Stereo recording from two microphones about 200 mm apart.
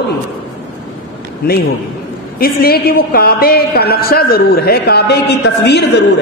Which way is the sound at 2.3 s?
50° left (ahead or behind).